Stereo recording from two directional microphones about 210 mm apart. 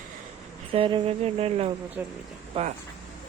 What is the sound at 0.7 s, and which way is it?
Speech, 25° right (ahead or behind).